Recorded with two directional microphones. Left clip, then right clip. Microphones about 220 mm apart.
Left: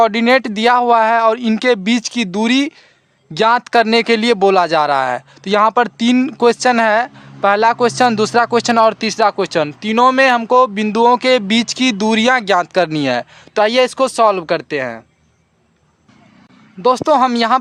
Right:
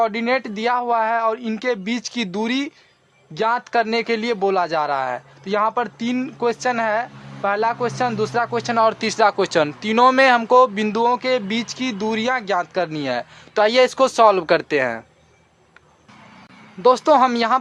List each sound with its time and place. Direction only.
0.0 s speech: 35° left (ahead or behind)
16.8 s speech: 30° left (ahead or behind)